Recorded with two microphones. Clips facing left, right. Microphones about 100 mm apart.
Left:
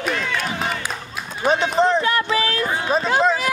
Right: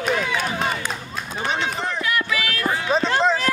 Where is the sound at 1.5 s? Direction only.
40° left (ahead or behind).